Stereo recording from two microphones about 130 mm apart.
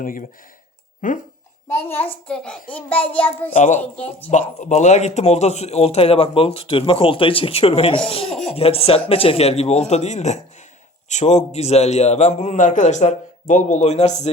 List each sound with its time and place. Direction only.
0.0 s speech: 90° left
1.6 s a child's voice: 15° left (ahead or behind)
2.2 s a child's voice: 5° left (ahead or behind)
3.5 s a woman's voice: 65° left (ahead or behind)
3.8 s a child's voice: 10° left (ahead or behind)
4.3 s a man's voice: 70° left (ahead or behind)